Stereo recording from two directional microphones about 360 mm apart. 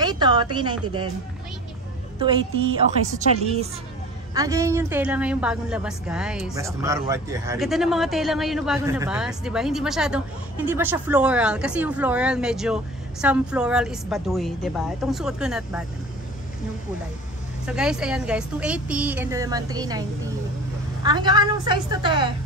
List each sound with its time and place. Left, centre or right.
0.0 s a woman's voice: centre
2.1 s a woman's voice: centre
17.6 s a woman's voice: centre